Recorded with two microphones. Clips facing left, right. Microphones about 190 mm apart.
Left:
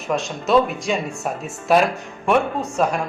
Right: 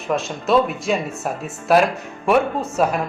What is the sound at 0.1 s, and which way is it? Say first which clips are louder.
Speech: even; centre (ahead or behind).